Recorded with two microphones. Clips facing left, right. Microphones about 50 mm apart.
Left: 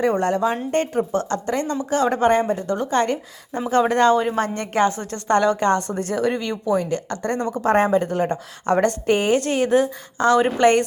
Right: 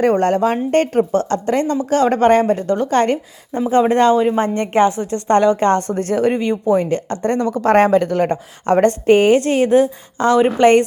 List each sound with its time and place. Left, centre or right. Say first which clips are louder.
0.0 s a woman's voice: right 5 dB; right
3.7 s speech: right 4 dB; right
3.9 s a woman's voice: right 4 dB; right
7.5 s speech: right 5 dB; right
8.3 s a woman's voice: right 4 dB; right